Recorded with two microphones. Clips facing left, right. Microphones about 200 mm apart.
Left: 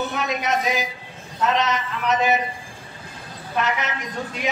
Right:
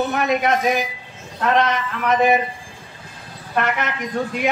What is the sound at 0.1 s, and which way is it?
A man's voice, 55° right (ahead or behind).